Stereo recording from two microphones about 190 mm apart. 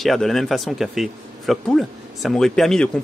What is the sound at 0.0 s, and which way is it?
Speech, centre (ahead or behind).